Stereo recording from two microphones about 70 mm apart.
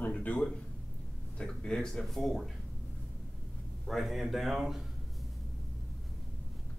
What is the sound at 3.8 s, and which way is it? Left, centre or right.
Speech, centre.